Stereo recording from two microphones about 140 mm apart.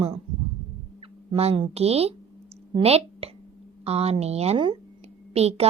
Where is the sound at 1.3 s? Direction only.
40° right (ahead or behind).